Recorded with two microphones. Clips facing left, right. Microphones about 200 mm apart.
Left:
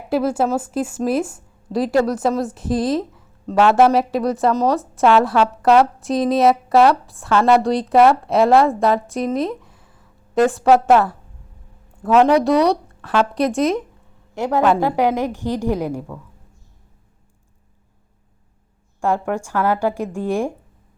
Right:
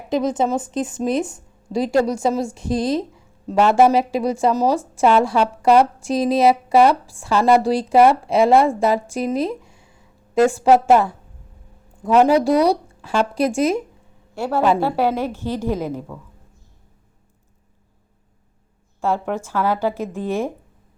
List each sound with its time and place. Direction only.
0.1 s a woman's voice: 5° left (ahead or behind)
10.8 s a woman's voice: 5° right (ahead or behind)
14.3 s a woman's voice: 15° left (ahead or behind)
18.9 s a woman's voice: 15° left (ahead or behind)